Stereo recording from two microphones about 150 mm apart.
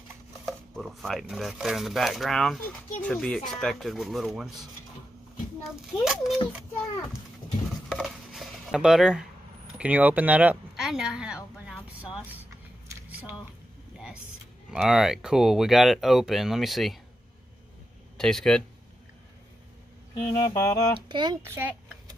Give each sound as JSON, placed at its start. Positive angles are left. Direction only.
{"t": 0.5, "sound": "speech", "side_deg": 0}
{"t": 6.0, "sound": "speech", "side_deg": 0}
{"t": 7.9, "sound": "dishes", "side_deg": 0}
{"t": 9.8, "sound": "speech", "side_deg": -10}
{"t": 13.9, "sound": "vehicle", "side_deg": -5}
{"t": 14.7, "sound": "speech", "side_deg": -5}
{"t": 18.1, "sound": "speech", "side_deg": 5}
{"t": 20.3, "sound": "mantra", "side_deg": 25}
{"t": 21.1, "sound": "speech", "side_deg": -30}
{"t": 21.4, "sound": "a child's voice", "side_deg": -15}